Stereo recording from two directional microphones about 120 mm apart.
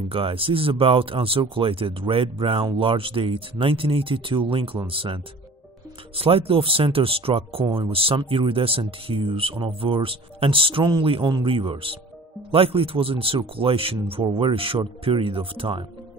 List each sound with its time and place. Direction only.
0.1 s speech: 50° right (ahead or behind)